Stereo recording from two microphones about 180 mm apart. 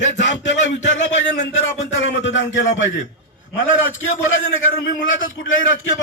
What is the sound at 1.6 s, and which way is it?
Speech, 80° left.